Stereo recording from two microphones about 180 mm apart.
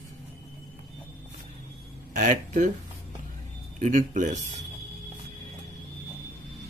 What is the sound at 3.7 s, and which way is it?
Speech, 45° right (ahead or behind).